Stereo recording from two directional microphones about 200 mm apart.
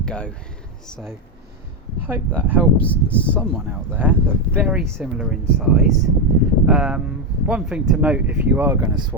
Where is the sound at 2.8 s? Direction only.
5° left (ahead or behind).